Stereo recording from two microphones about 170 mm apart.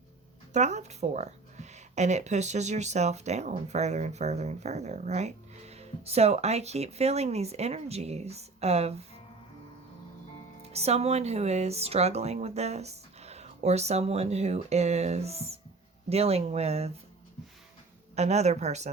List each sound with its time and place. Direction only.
0.5 s speech: 45° right (ahead or behind)
10.6 s speech: 40° right (ahead or behind)
18.1 s speech: 40° right (ahead or behind)